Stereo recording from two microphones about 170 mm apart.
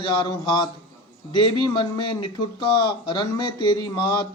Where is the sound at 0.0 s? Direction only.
25° left (ahead or behind).